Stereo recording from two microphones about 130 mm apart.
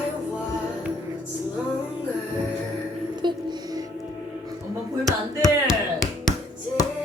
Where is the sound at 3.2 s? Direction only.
35° right (ahead or behind).